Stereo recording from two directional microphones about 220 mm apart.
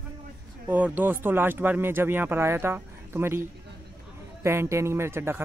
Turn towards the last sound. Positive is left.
turn(degrees=-10)  # may be behind; listen again after turning